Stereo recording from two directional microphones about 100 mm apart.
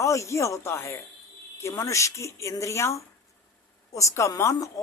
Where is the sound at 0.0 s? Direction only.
30° left (ahead or behind).